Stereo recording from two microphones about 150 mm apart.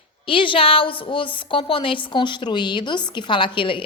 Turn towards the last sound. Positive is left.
turn(degrees=35)  # may be behind; listen again after turning